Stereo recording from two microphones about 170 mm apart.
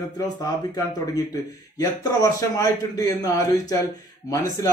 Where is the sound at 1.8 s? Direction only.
20° left (ahead or behind).